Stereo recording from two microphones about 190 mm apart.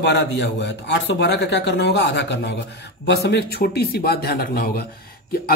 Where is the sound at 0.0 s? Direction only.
65° left (ahead or behind).